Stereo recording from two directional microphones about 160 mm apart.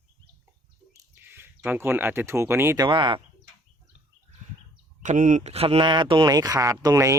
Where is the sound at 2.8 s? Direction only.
30° right (ahead or behind).